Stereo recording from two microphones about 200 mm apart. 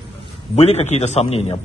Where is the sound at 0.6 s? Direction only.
35° left (ahead or behind).